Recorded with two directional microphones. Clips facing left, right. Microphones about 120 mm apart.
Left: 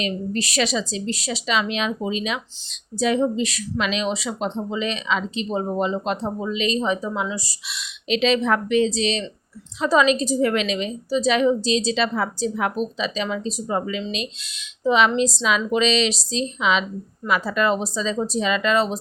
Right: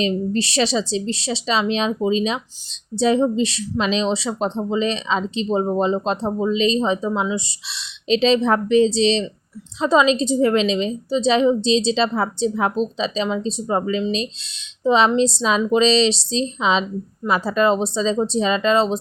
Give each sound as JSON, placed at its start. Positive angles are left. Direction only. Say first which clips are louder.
{"t": 0.0, "sound": "a woman's voice", "louder": "right 5 dB", "side_deg": -30}